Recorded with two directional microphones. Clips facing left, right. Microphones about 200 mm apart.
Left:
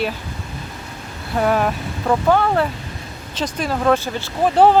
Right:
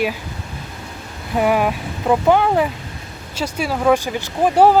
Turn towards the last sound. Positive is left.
turn(degrees=-10)  # may be behind; listen again after turning